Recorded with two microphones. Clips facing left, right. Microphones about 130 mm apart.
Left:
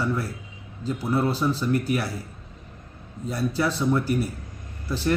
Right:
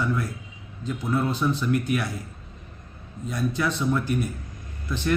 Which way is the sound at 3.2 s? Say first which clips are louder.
Left 1 dB; 30° left (ahead or behind).